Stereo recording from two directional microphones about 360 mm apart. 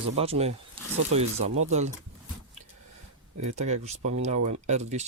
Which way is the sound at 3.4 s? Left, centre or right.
Centre.